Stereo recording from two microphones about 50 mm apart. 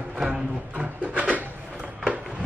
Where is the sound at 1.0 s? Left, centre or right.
Right.